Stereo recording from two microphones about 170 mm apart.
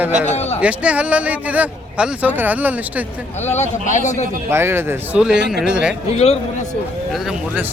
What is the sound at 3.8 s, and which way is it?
Speech, 45° left (ahead or behind).